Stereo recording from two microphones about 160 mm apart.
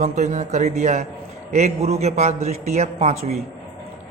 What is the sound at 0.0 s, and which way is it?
Speech, 45° right (ahead or behind).